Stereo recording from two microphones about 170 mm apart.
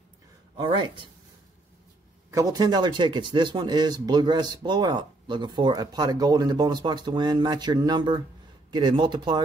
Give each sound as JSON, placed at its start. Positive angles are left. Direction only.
{"t": 0.6, "sound": "speech", "side_deg": -30}
{"t": 2.3, "sound": "speech", "side_deg": -20}